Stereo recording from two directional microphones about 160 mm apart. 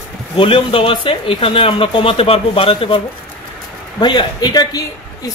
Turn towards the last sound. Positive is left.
turn(degrees=25)  # may be behind; listen again after turning